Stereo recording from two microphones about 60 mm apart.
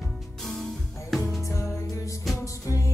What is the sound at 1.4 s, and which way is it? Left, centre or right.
Music, left.